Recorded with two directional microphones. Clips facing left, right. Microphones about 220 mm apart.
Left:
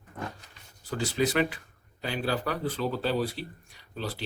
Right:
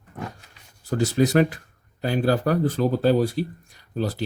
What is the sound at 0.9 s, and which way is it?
Speech, 45° right (ahead or behind).